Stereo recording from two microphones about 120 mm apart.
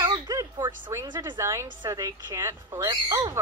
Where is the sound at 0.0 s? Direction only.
30° right (ahead or behind).